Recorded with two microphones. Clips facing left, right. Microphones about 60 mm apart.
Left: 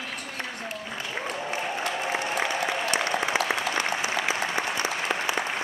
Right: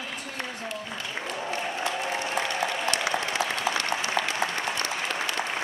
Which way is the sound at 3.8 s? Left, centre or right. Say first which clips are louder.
Even; centre.